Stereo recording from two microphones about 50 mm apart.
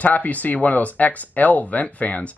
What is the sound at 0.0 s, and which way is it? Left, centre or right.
Speech, left.